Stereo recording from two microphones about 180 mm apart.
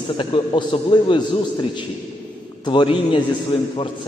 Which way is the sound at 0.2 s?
30° left (ahead or behind).